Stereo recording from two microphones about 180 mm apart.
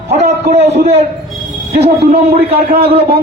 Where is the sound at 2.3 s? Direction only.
60° right (ahead or behind).